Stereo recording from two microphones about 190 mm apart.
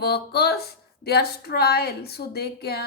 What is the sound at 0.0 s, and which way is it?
Speech, 55° left (ahead or behind).